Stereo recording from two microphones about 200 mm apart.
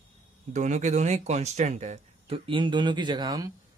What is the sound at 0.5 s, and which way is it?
Speech, 35° right (ahead or behind).